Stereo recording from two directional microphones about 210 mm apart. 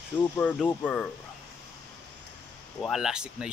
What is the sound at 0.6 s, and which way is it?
Speech, 5° left (ahead or behind).